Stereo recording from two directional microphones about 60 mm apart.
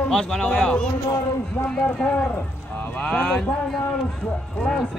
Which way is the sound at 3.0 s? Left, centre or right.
Centre.